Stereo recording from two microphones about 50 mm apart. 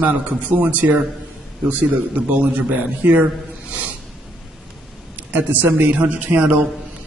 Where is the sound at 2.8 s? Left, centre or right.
Right.